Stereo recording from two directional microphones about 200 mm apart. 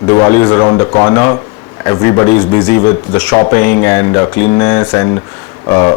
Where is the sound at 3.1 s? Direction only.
5° left (ahead or behind).